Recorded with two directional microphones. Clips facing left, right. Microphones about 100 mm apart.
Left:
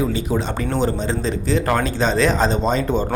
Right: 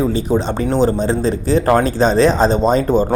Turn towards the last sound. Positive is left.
turn(degrees=-40)  # may be behind; listen again after turning